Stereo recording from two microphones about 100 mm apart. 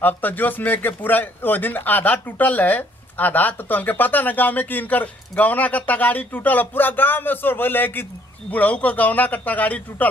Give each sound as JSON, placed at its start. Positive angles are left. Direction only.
{"t": 0.0, "sound": "a man's voice", "side_deg": 20}